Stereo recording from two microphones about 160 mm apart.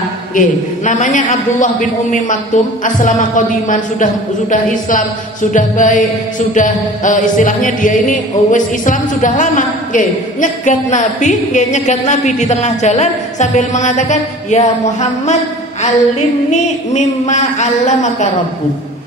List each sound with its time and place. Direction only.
0.4 s music: 50° left (ahead or behind)